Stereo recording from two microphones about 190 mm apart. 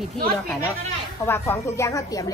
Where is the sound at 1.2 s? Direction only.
10° left (ahead or behind).